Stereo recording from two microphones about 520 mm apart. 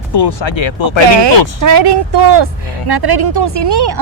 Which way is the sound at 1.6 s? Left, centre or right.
Right.